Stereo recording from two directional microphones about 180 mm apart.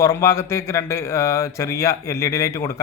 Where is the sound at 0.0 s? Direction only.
15° left (ahead or behind).